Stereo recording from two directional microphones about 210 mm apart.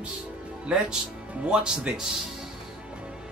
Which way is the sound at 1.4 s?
5° right (ahead or behind).